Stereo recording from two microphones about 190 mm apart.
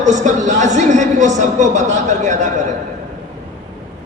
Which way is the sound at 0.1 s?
40° right (ahead or behind).